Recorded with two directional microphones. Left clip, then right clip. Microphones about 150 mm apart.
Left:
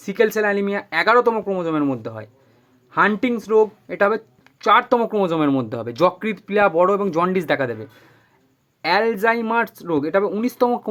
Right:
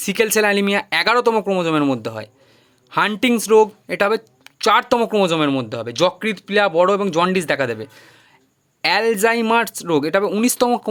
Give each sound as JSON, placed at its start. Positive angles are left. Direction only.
{"t": 0.0, "sound": "speech", "side_deg": -25}
{"t": 5.4, "sound": "speech", "side_deg": 0}